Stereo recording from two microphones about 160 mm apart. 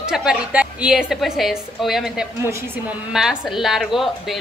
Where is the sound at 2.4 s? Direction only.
15° right (ahead or behind).